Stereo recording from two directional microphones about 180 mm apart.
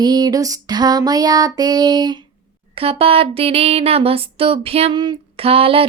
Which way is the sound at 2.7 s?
30° right (ahead or behind).